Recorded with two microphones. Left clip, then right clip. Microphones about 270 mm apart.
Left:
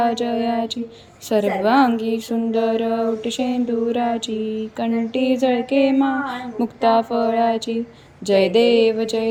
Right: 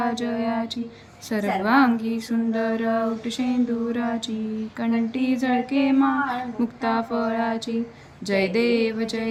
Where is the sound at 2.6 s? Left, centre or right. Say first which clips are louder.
Left 7 dB; centre.